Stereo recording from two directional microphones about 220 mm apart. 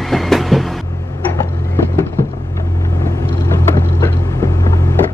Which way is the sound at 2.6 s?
10° left (ahead or behind).